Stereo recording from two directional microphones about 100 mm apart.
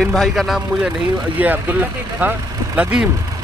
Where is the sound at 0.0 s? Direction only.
Centre (ahead or behind).